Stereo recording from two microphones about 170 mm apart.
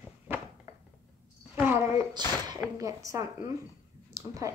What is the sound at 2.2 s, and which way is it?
A woman's voice, 25° right (ahead or behind).